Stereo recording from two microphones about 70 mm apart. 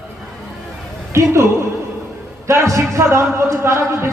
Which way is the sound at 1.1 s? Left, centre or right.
Right.